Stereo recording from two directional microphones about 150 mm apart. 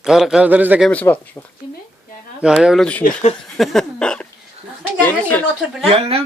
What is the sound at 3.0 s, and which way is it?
Speech, 65° left (ahead or behind).